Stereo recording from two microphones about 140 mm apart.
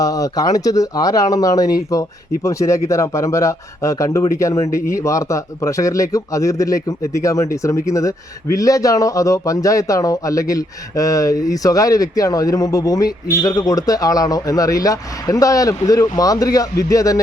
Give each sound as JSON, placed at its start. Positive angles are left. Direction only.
{"t": 0.0, "sound": "speech", "side_deg": 25}